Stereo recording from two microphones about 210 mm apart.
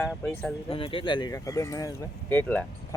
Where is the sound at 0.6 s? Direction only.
25° left (ahead or behind).